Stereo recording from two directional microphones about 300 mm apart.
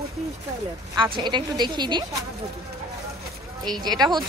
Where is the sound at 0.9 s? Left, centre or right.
Centre.